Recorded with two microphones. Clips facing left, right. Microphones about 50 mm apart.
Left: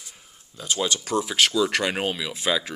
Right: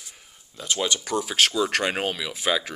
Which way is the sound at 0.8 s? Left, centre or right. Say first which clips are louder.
Right 2 dB; right.